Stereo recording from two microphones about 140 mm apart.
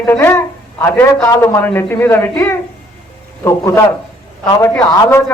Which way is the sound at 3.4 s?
20° left (ahead or behind).